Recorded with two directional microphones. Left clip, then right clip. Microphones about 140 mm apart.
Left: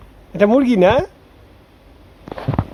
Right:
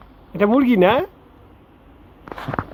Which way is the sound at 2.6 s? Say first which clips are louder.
Right 1 dB; 90° right.